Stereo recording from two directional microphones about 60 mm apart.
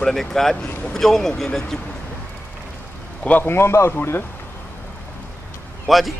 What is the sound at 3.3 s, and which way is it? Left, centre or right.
Speech, left.